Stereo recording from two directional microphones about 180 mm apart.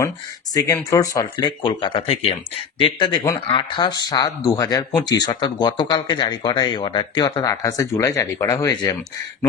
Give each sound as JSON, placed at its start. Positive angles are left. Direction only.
{"t": 0.6, "sound": "speech", "side_deg": 20}